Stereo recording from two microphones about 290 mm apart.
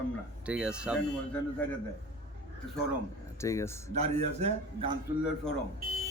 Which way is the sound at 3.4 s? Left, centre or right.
Centre.